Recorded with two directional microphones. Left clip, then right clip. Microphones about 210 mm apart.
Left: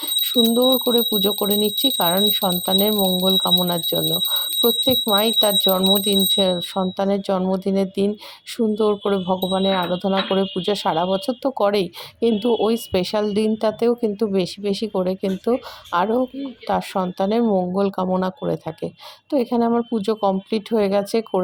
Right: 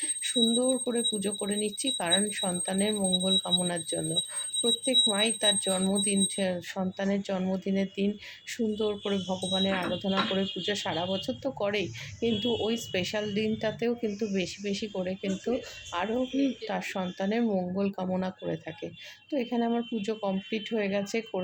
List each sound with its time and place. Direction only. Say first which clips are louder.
0.0 s alarm clock: left 10 dB; 35° left (ahead or behind)
0.9 s speech: left 12 dB; 35° left (ahead or behind)